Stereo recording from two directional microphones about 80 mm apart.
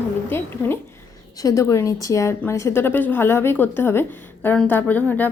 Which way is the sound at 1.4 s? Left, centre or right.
Left.